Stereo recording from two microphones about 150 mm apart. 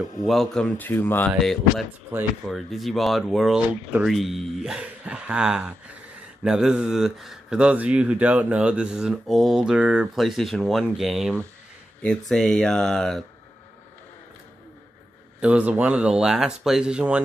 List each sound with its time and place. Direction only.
0.3 s a man's voice: centre (ahead or behind)
0.7 s speech: 15° left (ahead or behind)
1.4 s a man's voice: centre (ahead or behind)
15.4 s speech: 10° right (ahead or behind)